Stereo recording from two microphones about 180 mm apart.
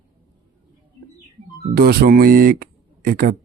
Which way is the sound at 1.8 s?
60° right (ahead or behind).